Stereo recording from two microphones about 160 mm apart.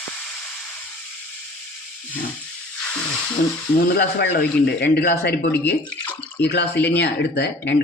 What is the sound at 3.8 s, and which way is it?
A man's voice, 80° left.